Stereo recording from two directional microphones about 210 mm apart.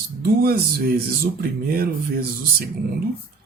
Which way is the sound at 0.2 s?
45° right (ahead or behind).